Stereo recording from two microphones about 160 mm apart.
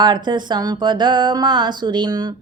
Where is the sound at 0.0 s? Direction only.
30° right (ahead or behind).